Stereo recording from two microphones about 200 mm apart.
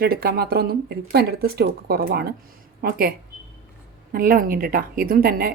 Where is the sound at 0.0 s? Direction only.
50° right (ahead or behind).